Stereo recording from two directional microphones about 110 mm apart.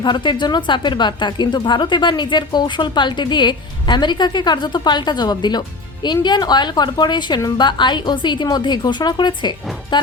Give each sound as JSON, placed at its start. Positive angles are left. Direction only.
{"t": 0.0, "sound": "speech", "side_deg": 45}
{"t": 9.9, "sound": "music", "side_deg": 45}